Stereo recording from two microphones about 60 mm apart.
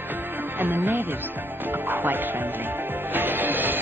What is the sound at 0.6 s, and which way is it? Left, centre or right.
Speech, right.